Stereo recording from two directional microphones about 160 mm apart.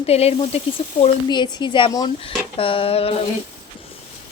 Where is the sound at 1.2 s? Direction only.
25° left (ahead or behind).